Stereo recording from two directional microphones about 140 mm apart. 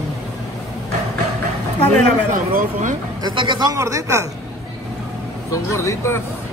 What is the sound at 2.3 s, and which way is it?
Speech, 70° right (ahead or behind).